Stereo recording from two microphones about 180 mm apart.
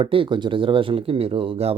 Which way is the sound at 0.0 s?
30° right (ahead or behind).